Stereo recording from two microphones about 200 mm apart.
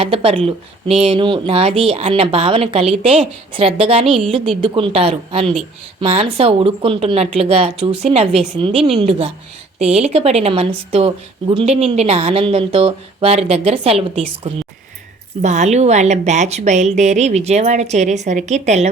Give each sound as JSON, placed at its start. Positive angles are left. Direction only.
{"t": 0.0, "sound": "a woman's voice", "side_deg": -30}